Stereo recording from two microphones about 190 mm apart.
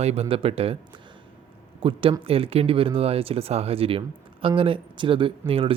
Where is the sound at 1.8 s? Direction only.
25° right (ahead or behind).